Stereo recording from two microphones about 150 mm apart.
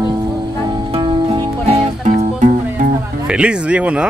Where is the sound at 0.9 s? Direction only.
35° right (ahead or behind).